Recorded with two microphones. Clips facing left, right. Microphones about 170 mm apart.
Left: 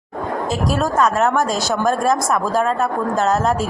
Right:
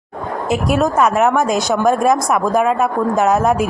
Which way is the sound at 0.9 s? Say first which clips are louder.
Even; 10° right (ahead or behind).